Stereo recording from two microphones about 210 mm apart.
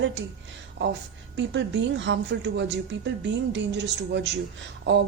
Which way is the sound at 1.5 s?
60° right (ahead or behind).